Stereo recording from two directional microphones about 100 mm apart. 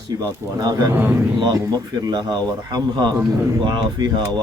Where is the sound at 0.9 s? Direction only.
25° right (ahead or behind).